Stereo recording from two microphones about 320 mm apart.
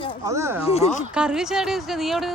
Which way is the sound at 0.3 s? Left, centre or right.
Centre.